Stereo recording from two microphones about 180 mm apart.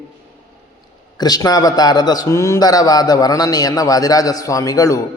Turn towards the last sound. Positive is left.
turn(degrees=20)  # may be behind; listen again after turning